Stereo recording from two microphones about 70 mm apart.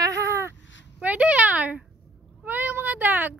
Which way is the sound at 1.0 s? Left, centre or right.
Right.